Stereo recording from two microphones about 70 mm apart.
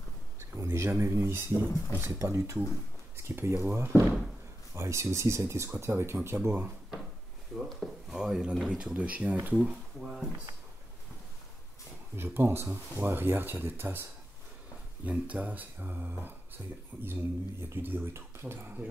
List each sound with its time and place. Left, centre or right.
0.4 s speech: right
1.5 s speech: left
2.2 s speech: right
7.5 s speech: centre
9.9 s a sound: centre
12.2 s speech: right
12.6 s speech: right
13.0 s speech: right
15.0 s speech: right